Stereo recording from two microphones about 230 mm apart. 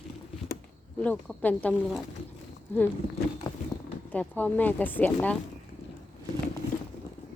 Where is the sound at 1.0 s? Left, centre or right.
Centre.